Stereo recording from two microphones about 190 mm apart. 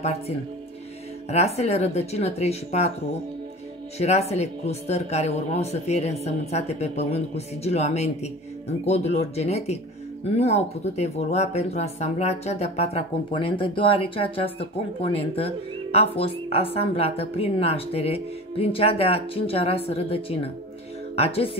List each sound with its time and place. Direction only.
1.3 s speech: 35° left (ahead or behind)
4.0 s speech: 35° left (ahead or behind)